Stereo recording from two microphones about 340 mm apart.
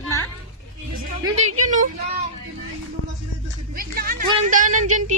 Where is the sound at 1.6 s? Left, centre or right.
Right.